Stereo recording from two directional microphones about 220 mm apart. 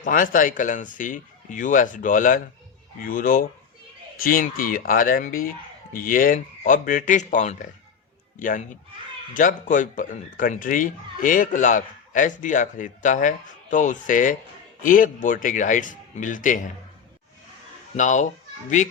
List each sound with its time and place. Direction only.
0.0 s speech: 40° left (ahead or behind)
17.9 s speech: 35° left (ahead or behind)